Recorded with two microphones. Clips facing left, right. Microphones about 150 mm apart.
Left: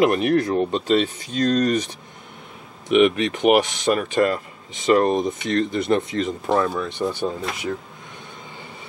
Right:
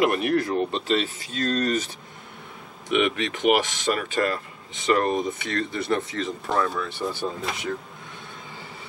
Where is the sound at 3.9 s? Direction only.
25° left (ahead or behind).